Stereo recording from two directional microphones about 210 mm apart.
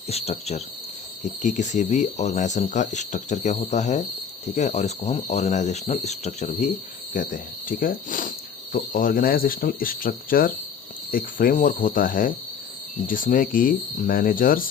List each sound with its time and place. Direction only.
0.1 s speech: 30° left (ahead or behind)